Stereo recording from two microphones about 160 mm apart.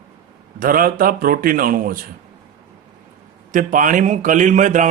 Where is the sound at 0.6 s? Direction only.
60° right (ahead or behind).